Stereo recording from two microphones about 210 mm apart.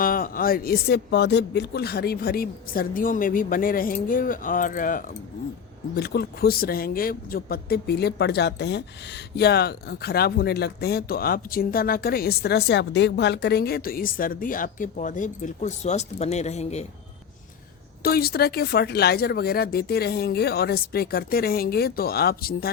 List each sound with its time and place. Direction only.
0.0 s speech: 45° left (ahead or behind)
18.0 s speech: 45° left (ahead or behind)